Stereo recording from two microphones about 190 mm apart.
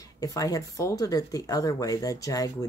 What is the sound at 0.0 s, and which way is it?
Speech, 20° left (ahead or behind).